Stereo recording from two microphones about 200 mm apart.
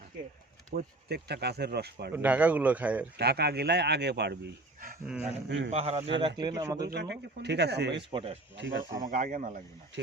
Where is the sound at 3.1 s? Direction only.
55° right (ahead or behind).